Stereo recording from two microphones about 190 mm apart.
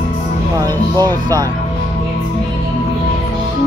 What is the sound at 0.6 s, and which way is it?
Music, 20° right (ahead or behind).